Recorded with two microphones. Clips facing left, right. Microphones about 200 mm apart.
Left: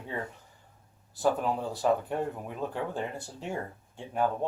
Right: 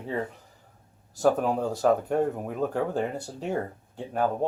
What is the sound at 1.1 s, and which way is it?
Speech, 45° right (ahead or behind).